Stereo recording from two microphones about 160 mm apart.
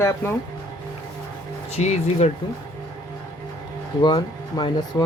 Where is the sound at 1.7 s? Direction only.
45° left (ahead or behind).